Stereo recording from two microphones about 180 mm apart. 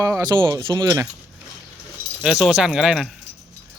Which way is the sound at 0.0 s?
20° right (ahead or behind).